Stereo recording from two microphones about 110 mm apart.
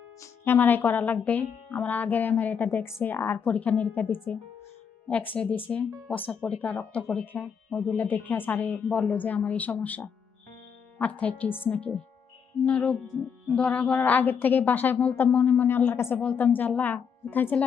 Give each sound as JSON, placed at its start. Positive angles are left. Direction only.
{"t": 0.2, "sound": "speech", "side_deg": 20}